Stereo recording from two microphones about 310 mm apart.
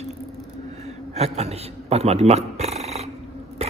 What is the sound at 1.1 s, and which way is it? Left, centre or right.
A man's voice, right.